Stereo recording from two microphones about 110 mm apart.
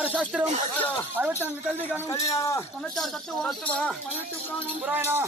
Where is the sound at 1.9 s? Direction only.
25° left (ahead or behind).